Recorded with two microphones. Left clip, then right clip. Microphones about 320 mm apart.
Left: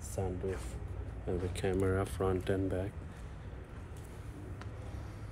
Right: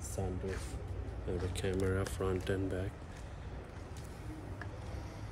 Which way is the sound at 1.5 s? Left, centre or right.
Centre.